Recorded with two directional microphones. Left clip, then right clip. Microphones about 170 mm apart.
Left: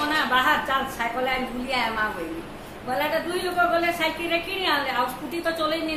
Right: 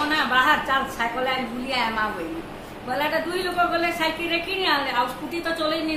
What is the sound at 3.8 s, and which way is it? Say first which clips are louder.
Speech: right 1 dB; 20° right (ahead or behind).